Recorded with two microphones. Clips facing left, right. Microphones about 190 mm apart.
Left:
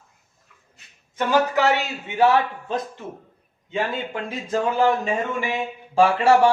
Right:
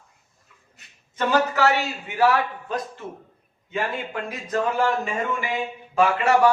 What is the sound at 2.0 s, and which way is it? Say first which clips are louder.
Speech: left 3 dB; 25° left (ahead or behind).